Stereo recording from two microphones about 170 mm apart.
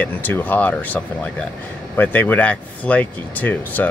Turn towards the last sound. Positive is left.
turn(degrees=10)  # may be behind; listen again after turning